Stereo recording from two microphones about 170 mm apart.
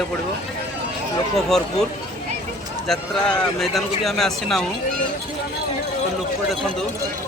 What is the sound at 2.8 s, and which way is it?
Speech, centre (ahead or behind).